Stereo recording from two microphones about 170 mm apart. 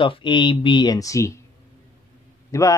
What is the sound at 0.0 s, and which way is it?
A man's voice, 30° left (ahead or behind).